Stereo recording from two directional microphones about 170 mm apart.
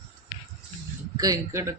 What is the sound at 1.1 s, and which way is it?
Speech, 20° right (ahead or behind).